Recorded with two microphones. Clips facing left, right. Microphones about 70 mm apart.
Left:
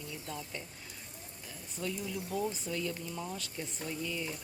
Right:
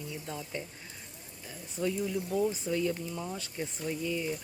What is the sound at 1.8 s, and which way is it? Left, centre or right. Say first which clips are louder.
Speech: right 6 dB; centre.